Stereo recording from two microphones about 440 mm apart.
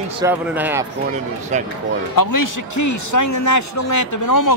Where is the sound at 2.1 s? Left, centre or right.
Left.